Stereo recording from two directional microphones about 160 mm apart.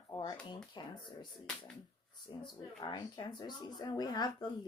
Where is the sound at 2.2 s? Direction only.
30° left (ahead or behind).